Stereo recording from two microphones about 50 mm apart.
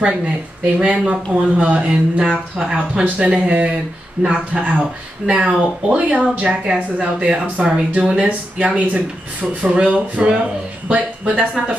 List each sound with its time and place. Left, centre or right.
0.7 s speech: right
8.3 s speech: right